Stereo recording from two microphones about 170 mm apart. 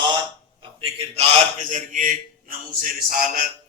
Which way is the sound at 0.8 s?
40° right (ahead or behind).